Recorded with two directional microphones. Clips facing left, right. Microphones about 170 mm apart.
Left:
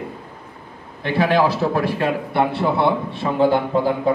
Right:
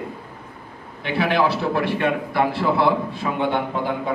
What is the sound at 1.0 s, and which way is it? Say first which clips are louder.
A man's voice: left 3 dB; 35° left (ahead or behind).